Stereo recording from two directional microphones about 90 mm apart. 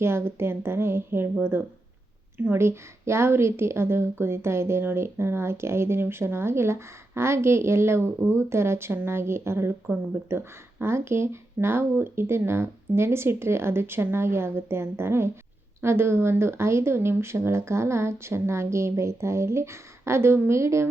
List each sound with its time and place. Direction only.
0.0 s a woman's voice: 30° right (ahead or behind)